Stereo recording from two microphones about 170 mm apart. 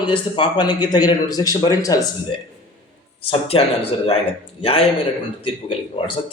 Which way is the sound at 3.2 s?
35° left (ahead or behind).